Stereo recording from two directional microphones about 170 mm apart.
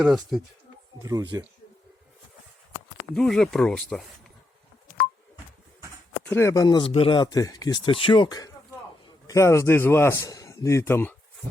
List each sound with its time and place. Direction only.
0.0 s speech: centre (ahead or behind)
1.0 s speech: 20° right (ahead or behind)
3.2 s speech: centre (ahead or behind)
6.2 s a man's voice: 15° left (ahead or behind)